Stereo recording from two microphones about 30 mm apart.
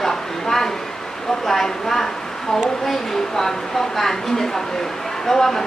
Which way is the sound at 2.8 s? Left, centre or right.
Centre.